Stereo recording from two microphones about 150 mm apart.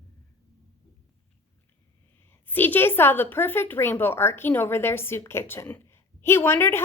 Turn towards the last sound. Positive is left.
turn(degrees=15)  # may be behind; listen again after turning